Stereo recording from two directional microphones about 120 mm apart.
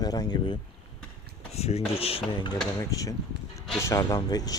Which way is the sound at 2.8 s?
30° left (ahead or behind).